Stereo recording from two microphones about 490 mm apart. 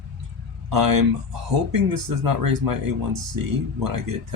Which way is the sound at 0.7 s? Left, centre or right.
Right.